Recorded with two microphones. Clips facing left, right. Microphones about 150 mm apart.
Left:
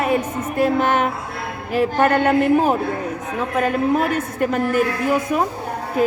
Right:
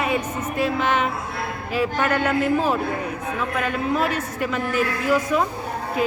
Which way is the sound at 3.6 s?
45° left (ahead or behind).